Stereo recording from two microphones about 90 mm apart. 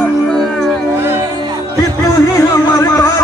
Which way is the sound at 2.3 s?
40° left (ahead or behind).